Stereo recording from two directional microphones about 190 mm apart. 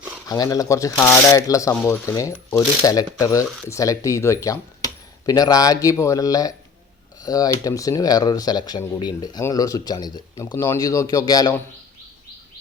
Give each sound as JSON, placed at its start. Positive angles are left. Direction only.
{"t": 0.3, "sound": "speech", "side_deg": 20}